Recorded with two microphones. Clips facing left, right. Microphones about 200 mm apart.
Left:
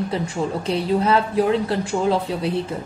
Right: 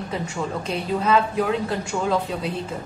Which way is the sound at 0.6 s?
35° left (ahead or behind).